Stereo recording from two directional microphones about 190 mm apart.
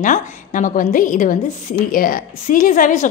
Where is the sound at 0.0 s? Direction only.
45° left (ahead or behind).